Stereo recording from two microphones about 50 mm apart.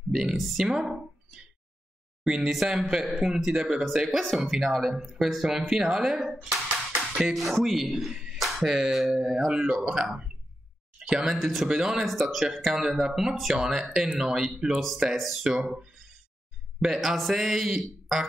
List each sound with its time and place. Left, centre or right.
0.1 s speech: centre
0.4 s speech: centre
0.7 s speech: centre
2.5 s speech: centre
11.3 s speech: centre
16.8 s speech: centre